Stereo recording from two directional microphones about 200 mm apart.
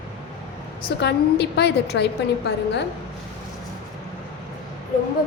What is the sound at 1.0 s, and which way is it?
A woman's voice, 55° left (ahead or behind).